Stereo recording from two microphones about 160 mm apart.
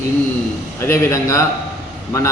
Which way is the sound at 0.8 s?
20° left (ahead or behind).